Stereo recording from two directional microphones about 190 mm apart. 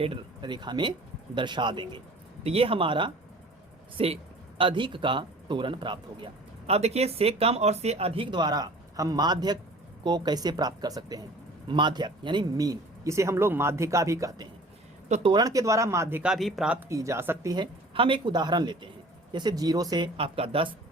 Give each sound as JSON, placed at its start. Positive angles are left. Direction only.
{"t": 0.0, "sound": "speech", "side_deg": -25}
{"t": 15.1, "sound": "speech", "side_deg": -25}
{"t": 16.9, "sound": "speech", "side_deg": -15}